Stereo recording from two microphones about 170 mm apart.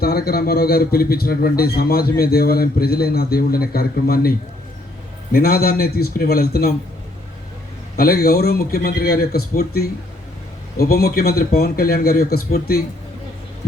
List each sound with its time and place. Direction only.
0.0 s speech: 65° left (ahead or behind)
7.9 s speech: 60° left (ahead or behind)